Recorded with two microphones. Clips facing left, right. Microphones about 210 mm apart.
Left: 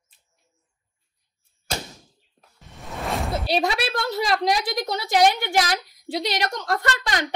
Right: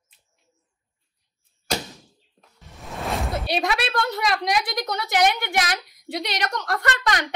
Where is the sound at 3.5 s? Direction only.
30° left (ahead or behind).